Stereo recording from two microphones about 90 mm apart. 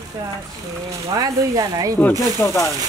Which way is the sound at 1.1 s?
45° right (ahead or behind).